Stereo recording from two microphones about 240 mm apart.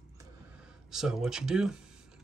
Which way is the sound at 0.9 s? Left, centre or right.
Centre.